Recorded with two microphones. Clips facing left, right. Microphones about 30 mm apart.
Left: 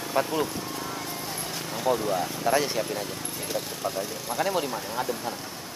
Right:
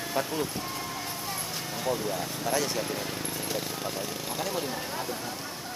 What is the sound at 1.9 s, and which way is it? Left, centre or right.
Speech, centre.